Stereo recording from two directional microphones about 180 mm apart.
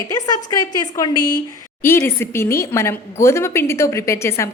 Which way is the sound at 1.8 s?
10° left (ahead or behind).